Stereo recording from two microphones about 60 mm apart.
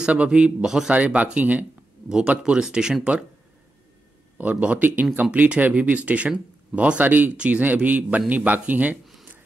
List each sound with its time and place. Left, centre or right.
0.0 s speech: centre
0.9 s speech: right
4.4 s speech: right